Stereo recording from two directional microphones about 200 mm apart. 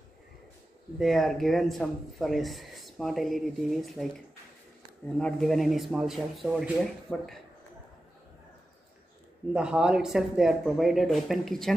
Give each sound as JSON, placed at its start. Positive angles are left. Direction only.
{"t": 0.9, "sound": "speech", "side_deg": 0}
{"t": 5.2, "sound": "speech", "side_deg": 0}
{"t": 9.5, "sound": "speech", "side_deg": -5}